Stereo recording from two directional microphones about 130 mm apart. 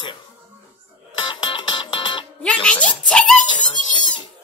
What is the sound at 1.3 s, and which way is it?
Music, 35° left (ahead or behind).